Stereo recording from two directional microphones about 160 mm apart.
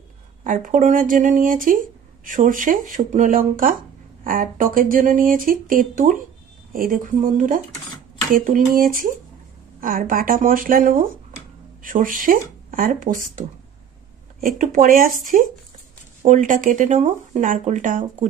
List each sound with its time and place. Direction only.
0.4 s speech: 55° right (ahead or behind)
16.2 s speech: 50° right (ahead or behind)